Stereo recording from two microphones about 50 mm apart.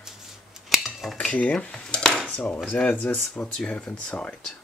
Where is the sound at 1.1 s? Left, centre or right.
Left.